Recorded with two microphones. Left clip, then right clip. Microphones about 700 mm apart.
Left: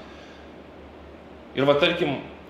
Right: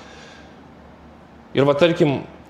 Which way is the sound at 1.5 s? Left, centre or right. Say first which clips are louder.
Right 4 dB; right.